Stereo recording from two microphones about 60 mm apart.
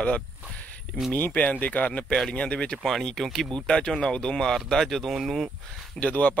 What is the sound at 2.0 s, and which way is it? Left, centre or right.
Speech, centre.